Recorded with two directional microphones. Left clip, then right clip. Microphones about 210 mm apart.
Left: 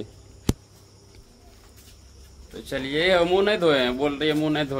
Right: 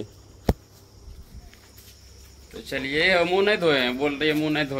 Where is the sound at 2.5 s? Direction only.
10° left (ahead or behind).